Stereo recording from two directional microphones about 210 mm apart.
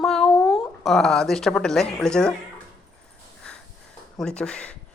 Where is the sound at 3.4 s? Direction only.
5° left (ahead or behind).